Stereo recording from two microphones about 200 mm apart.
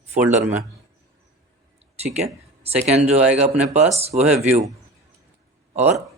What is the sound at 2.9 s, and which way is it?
Speech, 30° right (ahead or behind).